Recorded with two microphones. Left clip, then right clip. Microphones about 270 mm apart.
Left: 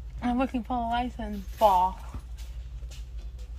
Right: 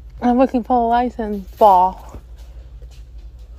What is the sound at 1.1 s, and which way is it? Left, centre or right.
Speech, right.